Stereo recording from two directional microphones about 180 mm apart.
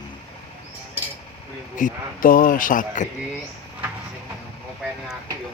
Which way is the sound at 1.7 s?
50° left (ahead or behind).